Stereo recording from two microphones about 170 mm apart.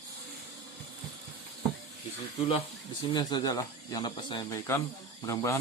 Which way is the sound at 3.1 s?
25° left (ahead or behind).